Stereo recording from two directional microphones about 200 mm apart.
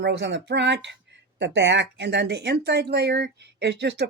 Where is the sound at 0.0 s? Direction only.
60° right (ahead or behind).